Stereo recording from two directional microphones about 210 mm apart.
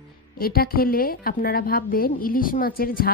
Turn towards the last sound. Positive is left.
turn(degrees=45)  # may be behind; listen again after turning